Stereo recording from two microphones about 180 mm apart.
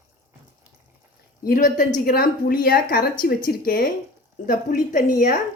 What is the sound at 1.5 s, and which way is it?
A woman's voice, 45° left (ahead or behind).